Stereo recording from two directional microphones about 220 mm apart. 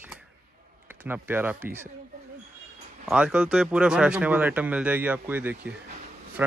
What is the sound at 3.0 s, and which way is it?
Speech, 5° right (ahead or behind).